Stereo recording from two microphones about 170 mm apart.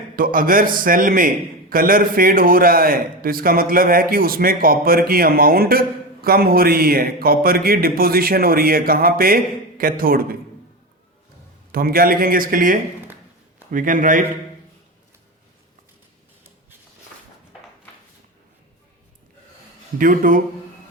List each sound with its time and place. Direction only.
0.2 s speech: 55° right (ahead or behind)
11.7 s a man's voice: 60° right (ahead or behind)
20.0 s a man's voice: 55° right (ahead or behind)